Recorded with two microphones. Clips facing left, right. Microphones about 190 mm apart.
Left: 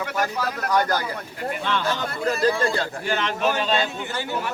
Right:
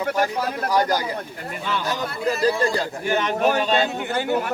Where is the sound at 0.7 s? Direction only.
15° right (ahead or behind).